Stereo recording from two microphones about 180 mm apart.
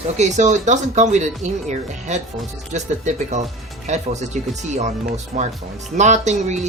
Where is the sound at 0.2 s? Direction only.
40° right (ahead or behind).